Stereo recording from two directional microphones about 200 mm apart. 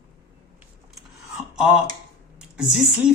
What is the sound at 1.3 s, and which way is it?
Speech, 5° right (ahead or behind).